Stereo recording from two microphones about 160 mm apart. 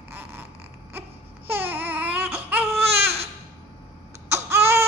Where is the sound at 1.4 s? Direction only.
10° right (ahead or behind).